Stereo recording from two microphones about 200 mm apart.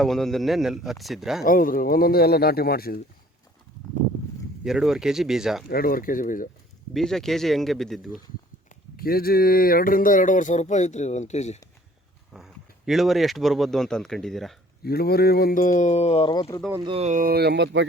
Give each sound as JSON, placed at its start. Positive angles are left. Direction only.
{"t": 0.0, "sound": "speech", "side_deg": 0}
{"t": 1.5, "sound": "a man's voice", "side_deg": 45}
{"t": 4.6, "sound": "speech", "side_deg": 0}
{"t": 5.6, "sound": "a man's voice", "side_deg": 50}
{"t": 6.9, "sound": "speech", "side_deg": 0}
{"t": 8.7, "sound": "speech", "side_deg": 45}
{"t": 12.3, "sound": "speech", "side_deg": 0}
{"t": 14.8, "sound": "speech", "side_deg": 50}
{"t": 16.8, "sound": "speech", "side_deg": -30}